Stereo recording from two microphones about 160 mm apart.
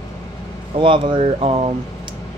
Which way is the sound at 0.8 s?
30° right (ahead or behind).